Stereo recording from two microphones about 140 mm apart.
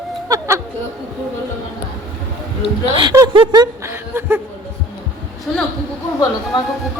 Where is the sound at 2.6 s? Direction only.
35° right (ahead or behind).